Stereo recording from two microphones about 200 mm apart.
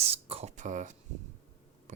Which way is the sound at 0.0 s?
30° right (ahead or behind).